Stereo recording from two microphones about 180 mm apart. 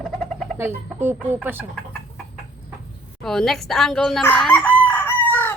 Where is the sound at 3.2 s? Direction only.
Centre (ahead or behind).